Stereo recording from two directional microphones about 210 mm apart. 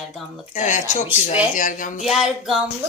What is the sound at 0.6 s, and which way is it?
Speech, 35° left (ahead or behind).